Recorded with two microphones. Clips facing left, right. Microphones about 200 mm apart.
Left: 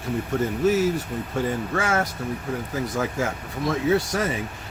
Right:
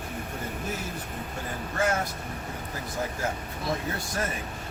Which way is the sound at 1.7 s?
90° left.